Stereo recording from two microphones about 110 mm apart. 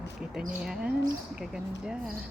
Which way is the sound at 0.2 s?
5° right (ahead or behind).